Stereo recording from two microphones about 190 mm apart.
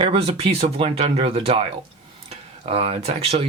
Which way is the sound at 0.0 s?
30° right (ahead or behind).